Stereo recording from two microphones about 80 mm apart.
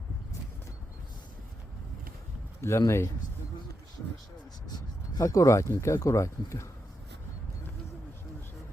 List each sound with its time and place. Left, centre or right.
2.6 s speech: left
4.7 s speech: left